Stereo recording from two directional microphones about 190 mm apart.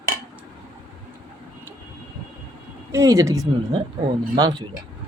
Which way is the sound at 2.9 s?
15° right (ahead or behind).